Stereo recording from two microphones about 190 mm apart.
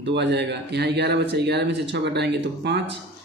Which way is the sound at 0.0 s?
65° right (ahead or behind).